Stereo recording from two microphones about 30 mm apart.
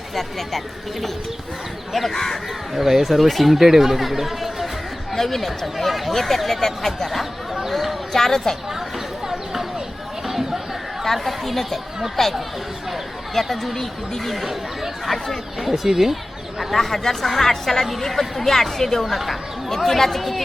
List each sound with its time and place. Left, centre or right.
0.1 s speech: centre
2.0 s speech: centre
2.7 s speech: centre
5.1 s speech: centre
7.7 s a sound: centre
8.1 s speech: centre
9.2 s a sound: centre
11.0 s speech: centre
13.4 s speech: centre
14.4 s speech: centre
15.1 s speech: centre
15.7 s speech: centre
16.7 s speech: centre
19.7 s speech: centre